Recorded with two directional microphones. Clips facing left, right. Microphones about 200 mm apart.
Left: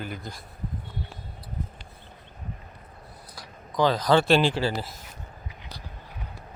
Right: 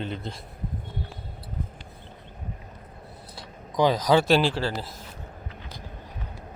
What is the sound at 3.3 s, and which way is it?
Speech, 15° right (ahead or behind).